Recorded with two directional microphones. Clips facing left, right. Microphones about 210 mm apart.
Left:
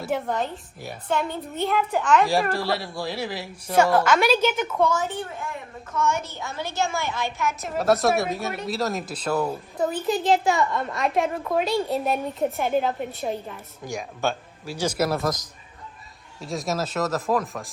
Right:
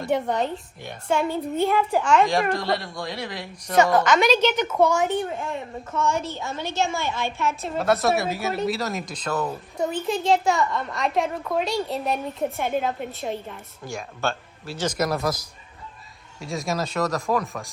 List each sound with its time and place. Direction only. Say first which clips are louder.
0.0 s a child's voice: right 3 dB; centre (ahead or behind)
2.2 s speech: even; 5° left (ahead or behind)
4.8 s a child's voice: right 3 dB; 10° right (ahead or behind)
6.1 s a woman's voice: right 1 dB; 30° right (ahead or behind)
7.8 s speech: left 1 dB; centre (ahead or behind)
13.8 s speech: left 1 dB; 15° left (ahead or behind)